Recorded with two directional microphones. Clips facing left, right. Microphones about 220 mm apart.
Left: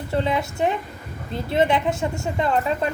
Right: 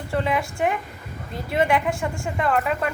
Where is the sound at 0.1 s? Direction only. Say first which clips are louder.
Left 1 dB; 25° left (ahead or behind).